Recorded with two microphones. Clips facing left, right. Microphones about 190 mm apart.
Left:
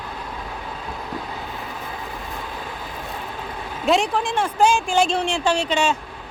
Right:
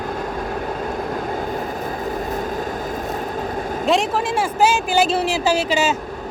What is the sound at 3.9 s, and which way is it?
Speech, centre (ahead or behind).